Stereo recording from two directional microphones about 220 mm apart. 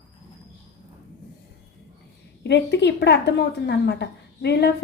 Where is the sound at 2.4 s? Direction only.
50° left (ahead or behind).